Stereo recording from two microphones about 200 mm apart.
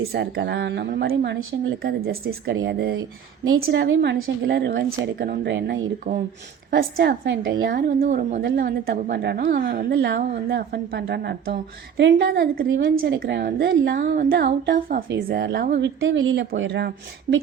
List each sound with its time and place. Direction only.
0.1 s a woman's voice: 55° right (ahead or behind)
2.5 s speech: 70° right (ahead or behind)
3.6 s a woman's voice: 60° right (ahead or behind)
6.7 s a woman's voice: 45° right (ahead or behind)
8.4 s a woman's voice: 55° right (ahead or behind)